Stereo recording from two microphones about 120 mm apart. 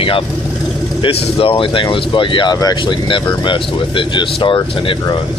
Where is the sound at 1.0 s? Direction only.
50° left (ahead or behind).